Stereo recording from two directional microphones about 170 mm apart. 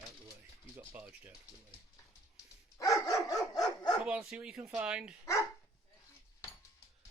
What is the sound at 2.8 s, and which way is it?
Dog, 20° left (ahead or behind).